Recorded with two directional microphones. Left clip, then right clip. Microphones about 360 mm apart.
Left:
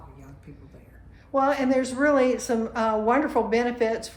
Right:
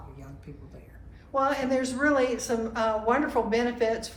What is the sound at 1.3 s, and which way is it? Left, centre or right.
A woman's voice, centre.